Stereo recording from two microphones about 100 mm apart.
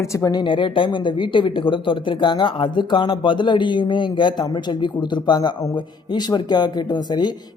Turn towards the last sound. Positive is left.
turn(degrees=45)  # may be behind; listen again after turning